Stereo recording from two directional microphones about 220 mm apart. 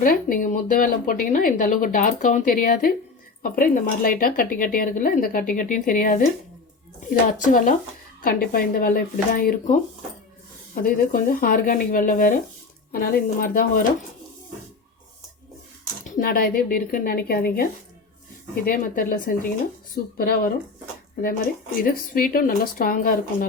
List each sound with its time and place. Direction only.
0.0 s speech: 40° left (ahead or behind)
10.8 s speech: 40° left (ahead or behind)
16.0 s speech: 40° left (ahead or behind)
21.8 s speech: 40° left (ahead or behind)